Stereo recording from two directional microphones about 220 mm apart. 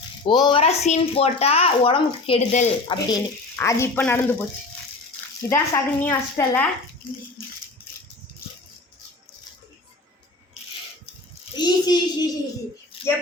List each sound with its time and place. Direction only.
0.3 s speech: 20° left (ahead or behind)
5.5 s speech: 10° left (ahead or behind)
11.5 s speech: 20° left (ahead or behind)